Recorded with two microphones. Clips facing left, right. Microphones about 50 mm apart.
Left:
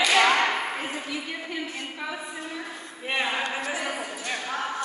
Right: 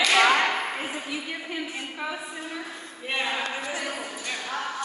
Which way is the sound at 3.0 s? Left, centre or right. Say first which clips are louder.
Left 1 dB; centre.